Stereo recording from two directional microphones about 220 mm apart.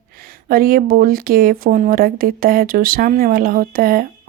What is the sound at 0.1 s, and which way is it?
Speech, 40° right (ahead or behind).